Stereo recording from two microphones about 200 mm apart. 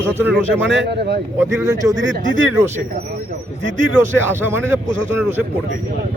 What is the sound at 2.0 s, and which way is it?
Speech, 70° right (ahead or behind).